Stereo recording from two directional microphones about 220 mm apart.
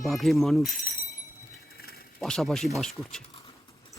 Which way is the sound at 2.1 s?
Centre (ahead or behind).